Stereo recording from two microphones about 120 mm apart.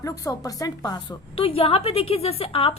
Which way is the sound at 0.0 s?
30° left (ahead or behind).